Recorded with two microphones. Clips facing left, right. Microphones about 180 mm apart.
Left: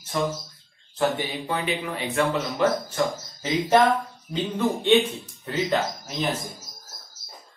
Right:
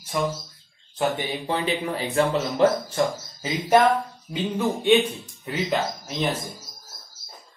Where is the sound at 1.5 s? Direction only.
30° right (ahead or behind).